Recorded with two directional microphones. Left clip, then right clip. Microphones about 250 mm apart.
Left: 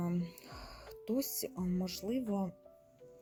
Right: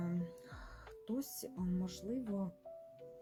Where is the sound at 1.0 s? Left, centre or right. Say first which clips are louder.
Left 7 dB; left.